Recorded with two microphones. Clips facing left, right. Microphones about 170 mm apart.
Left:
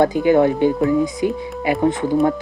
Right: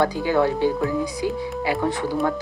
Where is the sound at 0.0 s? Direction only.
20° left (ahead or behind).